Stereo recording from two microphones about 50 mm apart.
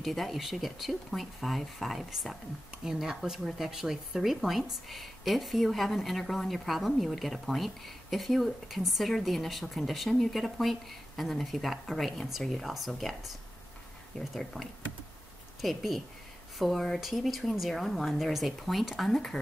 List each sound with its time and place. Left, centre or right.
0.0 s speech: centre
14.3 s speech: centre